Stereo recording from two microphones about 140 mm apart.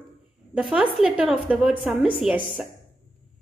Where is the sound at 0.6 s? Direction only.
5° right (ahead or behind).